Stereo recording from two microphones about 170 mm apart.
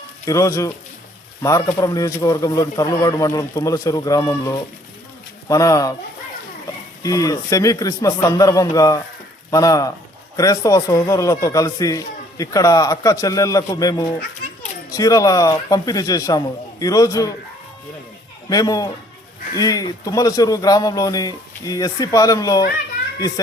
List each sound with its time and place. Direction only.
0.3 s speech: 20° left (ahead or behind)
7.0 s speech: 20° left (ahead or behind)
18.4 s speech: 20° left (ahead or behind)